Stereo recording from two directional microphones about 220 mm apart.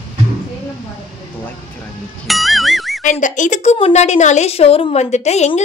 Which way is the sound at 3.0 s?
35° left (ahead or behind).